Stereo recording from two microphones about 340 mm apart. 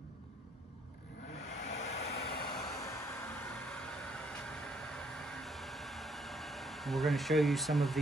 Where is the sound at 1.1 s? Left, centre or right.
Left.